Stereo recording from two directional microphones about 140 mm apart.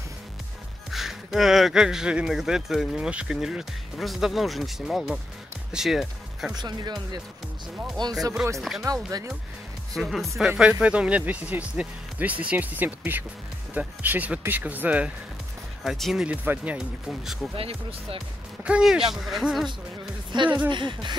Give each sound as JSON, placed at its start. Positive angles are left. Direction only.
{"t": 0.9, "sound": "speech", "side_deg": 0}
{"t": 6.5, "sound": "speech", "side_deg": -30}
{"t": 8.5, "sound": "speech", "side_deg": 0}
{"t": 9.9, "sound": "speech", "side_deg": 0}
{"t": 17.6, "sound": "speech", "side_deg": -45}
{"t": 18.6, "sound": "speech", "side_deg": -5}
{"t": 20.3, "sound": "speech", "side_deg": -30}